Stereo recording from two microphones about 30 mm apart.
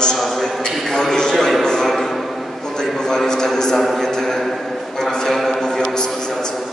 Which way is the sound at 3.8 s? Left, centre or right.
Centre.